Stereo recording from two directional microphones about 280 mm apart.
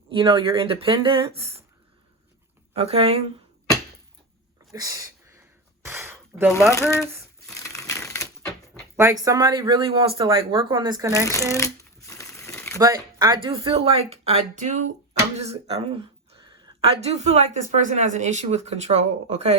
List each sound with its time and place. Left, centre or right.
0.1 s a woman's voice: centre
2.7 s a woman's voice: right
4.7 s speech: centre
5.8 s a sound: centre
6.7 s a sound: centre
9.0 s speech: centre
11.3 s crumpling: centre
12.8 s a woman's voice: centre